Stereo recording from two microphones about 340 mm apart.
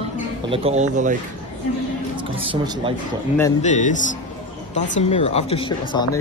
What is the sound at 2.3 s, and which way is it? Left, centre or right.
Speech, centre.